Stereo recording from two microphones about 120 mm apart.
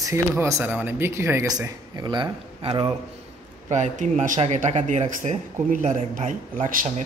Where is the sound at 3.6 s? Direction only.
90° right.